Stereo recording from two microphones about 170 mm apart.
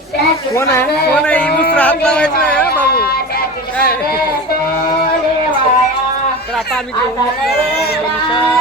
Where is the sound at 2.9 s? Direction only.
65° left (ahead or behind).